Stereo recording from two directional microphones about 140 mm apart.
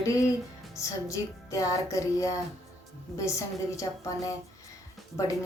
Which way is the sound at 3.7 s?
25° left (ahead or behind).